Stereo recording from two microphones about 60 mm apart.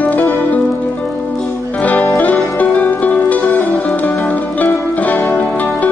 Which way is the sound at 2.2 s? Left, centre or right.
Left.